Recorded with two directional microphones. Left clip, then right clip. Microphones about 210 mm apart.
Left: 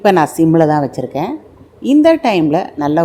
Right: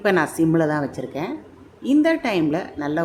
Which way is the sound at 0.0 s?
25° left (ahead or behind).